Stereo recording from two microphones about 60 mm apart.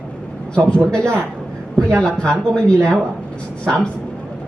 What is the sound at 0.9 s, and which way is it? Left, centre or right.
A woman's voice, centre.